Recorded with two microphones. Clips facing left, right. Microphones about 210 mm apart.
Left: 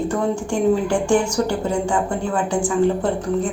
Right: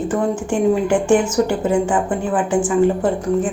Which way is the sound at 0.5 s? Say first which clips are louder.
Right 2 dB; 20° right (ahead or behind).